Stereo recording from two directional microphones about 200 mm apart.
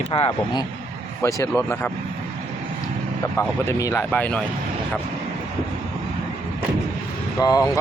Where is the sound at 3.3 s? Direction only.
15° left (ahead or behind).